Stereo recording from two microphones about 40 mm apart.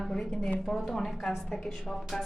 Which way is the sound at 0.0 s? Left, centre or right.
Centre.